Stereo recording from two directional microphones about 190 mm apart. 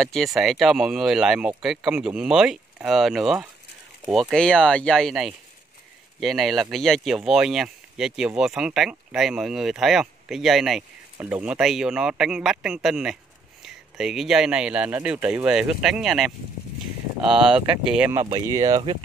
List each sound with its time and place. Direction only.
0.0 s speech: centre (ahead or behind)
18.2 s speech: 20° right (ahead or behind)